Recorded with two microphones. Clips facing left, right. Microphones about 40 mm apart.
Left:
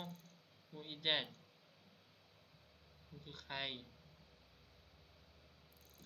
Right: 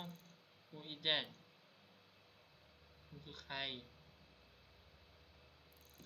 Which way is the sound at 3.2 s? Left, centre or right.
Centre.